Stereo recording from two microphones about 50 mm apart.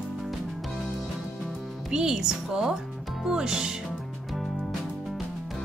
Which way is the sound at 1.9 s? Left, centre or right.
Centre.